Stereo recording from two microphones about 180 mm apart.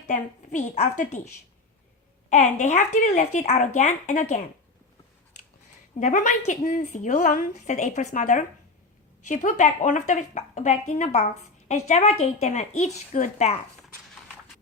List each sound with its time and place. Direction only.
0.1 s speech: 45° left (ahead or behind)
2.3 s speech: 40° left (ahead or behind)
6.0 s a woman's voice: 40° left (ahead or behind)